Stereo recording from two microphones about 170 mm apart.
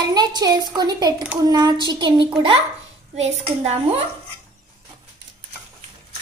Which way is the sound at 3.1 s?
40° right (ahead or behind).